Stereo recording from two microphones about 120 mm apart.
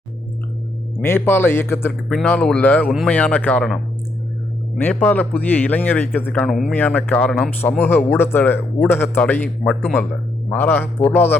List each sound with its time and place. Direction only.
1.0 s speech: 20° left (ahead or behind)
2.0 s speech: 10° left (ahead or behind)
4.8 s speech: 15° left (ahead or behind)
6.3 s speech: 5° left (ahead or behind)
6.7 s speech: 15° left (ahead or behind)
7.8 s speech: 20° left (ahead or behind)